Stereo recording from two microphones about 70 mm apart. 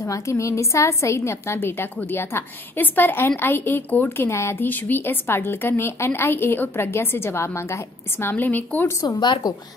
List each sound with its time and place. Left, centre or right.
0.0 s a woman's voice: left
4.3 s a woman's voice: left
9.0 s speech: left